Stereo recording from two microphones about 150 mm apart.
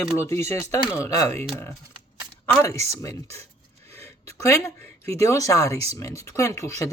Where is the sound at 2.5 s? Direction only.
20° left (ahead or behind).